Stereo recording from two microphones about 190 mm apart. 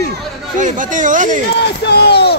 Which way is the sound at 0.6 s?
45° right (ahead or behind).